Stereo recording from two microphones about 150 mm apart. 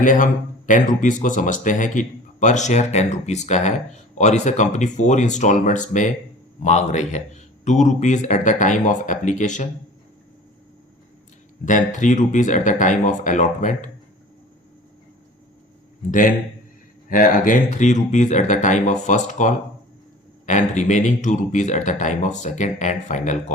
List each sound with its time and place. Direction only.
0.0 s a man's voice: 60° left (ahead or behind)
11.6 s a man's voice: 55° left (ahead or behind)
17.1 s a man's voice: 70° left (ahead or behind)